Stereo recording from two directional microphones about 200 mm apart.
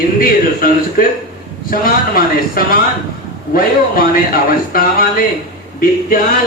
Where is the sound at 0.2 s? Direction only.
45° left (ahead or behind).